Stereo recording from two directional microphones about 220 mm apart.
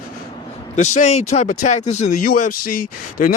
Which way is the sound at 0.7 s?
35° left (ahead or behind).